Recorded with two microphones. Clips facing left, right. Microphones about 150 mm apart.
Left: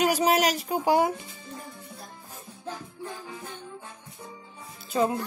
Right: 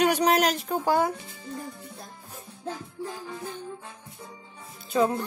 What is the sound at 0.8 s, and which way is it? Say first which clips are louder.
Speech: left 2 dB; 15° left (ahead or behind).